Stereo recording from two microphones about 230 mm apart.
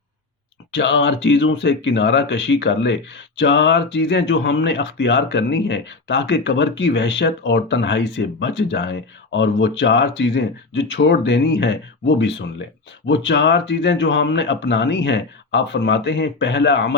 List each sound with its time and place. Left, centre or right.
0.7 s speech: left